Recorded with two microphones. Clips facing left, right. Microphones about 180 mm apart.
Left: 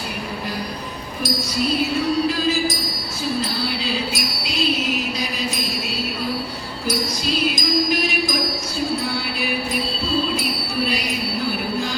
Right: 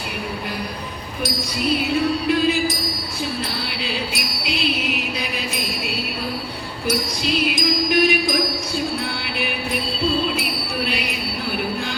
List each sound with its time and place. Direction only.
3.8 s music: 60° right (ahead or behind)
7.5 s music: 60° right (ahead or behind)
10.8 s a sound: 60° right (ahead or behind)